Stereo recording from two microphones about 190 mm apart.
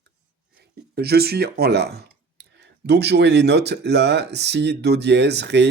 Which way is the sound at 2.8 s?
60° right (ahead or behind).